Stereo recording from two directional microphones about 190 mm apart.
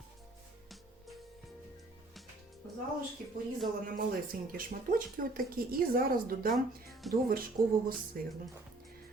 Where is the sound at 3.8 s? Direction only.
50° right (ahead or behind).